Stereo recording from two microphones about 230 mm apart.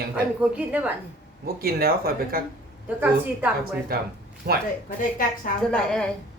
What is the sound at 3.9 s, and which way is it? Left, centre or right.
Speech, right.